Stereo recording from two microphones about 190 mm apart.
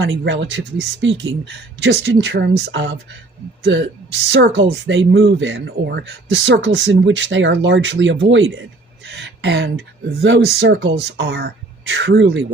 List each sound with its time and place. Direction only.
0.0 s speech: 80° right
4.3 s speech: 70° right (ahead or behind); by 8.6 s 90° right
9.0 s speech: 65° right (ahead or behind)